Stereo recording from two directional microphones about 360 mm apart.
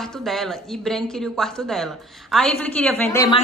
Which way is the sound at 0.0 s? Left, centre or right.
Centre.